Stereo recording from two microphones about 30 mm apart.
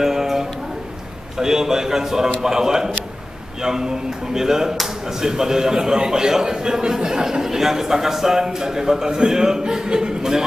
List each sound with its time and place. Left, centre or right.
0.0 s a sound: centre
1.4 s a man's voice: centre
9.6 s a man's voice: right